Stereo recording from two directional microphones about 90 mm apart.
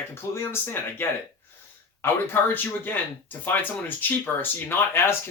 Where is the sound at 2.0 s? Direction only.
25° left (ahead or behind).